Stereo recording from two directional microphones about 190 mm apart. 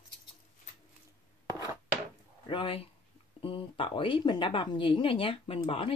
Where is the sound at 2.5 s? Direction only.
25° left (ahead or behind).